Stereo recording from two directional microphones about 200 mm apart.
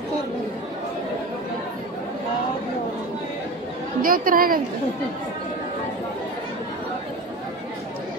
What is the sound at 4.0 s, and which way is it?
Speech, 45° right (ahead or behind).